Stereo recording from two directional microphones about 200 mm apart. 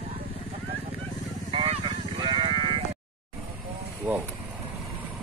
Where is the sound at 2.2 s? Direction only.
25° right (ahead or behind).